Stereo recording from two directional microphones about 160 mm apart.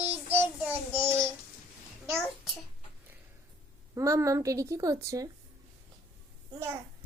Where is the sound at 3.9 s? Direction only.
20° right (ahead or behind).